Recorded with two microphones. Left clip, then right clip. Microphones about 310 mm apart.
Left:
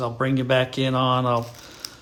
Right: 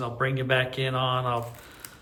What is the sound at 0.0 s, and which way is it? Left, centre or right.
A man's voice, centre.